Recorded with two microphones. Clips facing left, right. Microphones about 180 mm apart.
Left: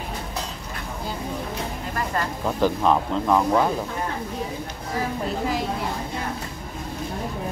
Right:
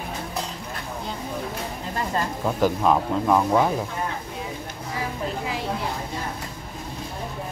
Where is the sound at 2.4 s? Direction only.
5° right (ahead or behind).